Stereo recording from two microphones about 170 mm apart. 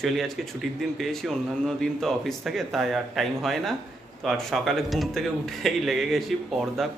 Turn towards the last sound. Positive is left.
turn(degrees=0)  # may be behind; listen again after turning